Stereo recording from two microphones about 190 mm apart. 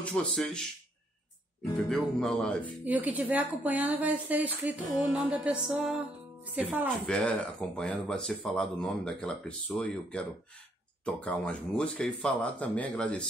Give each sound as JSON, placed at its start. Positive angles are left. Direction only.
{"t": 0.0, "sound": "speech", "side_deg": 5}
{"t": 2.8, "sound": "a woman's voice", "side_deg": -10}
{"t": 7.1, "sound": "speech", "side_deg": 5}